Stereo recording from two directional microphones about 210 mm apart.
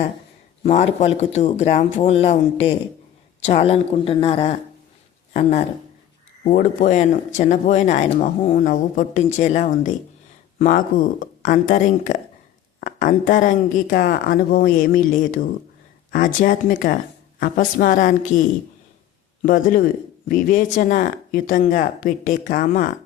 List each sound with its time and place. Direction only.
0.6 s a woman's voice: 35° left (ahead or behind)
18.3 s speech: centre (ahead or behind)
19.4 s speech: 40° left (ahead or behind)